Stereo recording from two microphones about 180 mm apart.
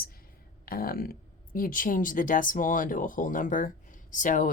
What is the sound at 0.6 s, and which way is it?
Speech, 55° left (ahead or behind).